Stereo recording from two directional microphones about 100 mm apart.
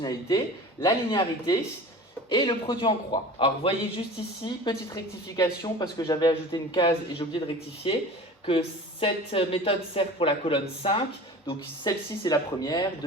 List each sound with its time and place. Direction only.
0.0 s a man's voice: 40° left (ahead or behind)
3.3 s speech: 65° left (ahead or behind)
5.4 s a man's voice: 40° left (ahead or behind)
6.5 s speech: 50° left (ahead or behind); by 11.0 s 70° left (ahead or behind)
11.4 s a man's voice: 55° left (ahead or behind)
12.2 s a man's voice: 40° left (ahead or behind)